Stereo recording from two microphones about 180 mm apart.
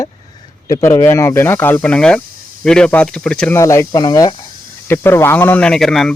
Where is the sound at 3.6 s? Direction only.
15° left (ahead or behind).